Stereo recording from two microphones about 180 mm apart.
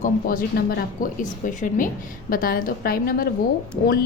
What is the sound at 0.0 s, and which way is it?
A woman's voice, 50° left (ahead or behind).